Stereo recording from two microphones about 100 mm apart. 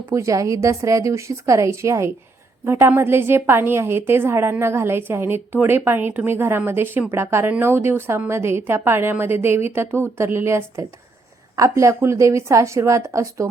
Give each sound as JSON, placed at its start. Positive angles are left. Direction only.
{"t": 0.1, "sound": "a woman's voice", "side_deg": -35}